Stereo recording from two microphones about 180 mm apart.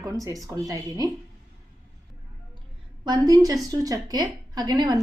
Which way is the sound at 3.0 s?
25° right (ahead or behind).